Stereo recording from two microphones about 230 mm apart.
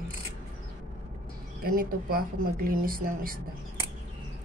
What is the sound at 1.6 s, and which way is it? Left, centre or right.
Speech, right.